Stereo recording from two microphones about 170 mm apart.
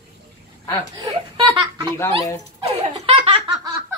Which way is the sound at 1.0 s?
25° right (ahead or behind).